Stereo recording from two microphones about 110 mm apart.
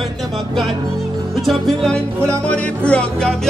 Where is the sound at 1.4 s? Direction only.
5° left (ahead or behind).